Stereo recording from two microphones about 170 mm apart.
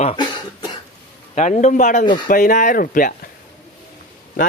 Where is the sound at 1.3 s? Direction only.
45° left (ahead or behind).